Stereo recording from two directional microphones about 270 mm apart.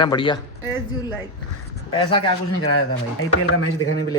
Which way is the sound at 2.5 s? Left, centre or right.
Left.